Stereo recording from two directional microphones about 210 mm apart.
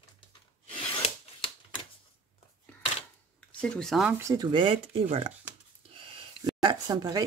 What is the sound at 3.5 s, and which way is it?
Speech, 5° left (ahead or behind).